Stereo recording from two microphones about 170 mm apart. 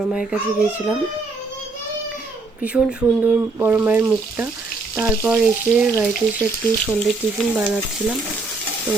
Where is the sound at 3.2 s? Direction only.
10° right (ahead or behind).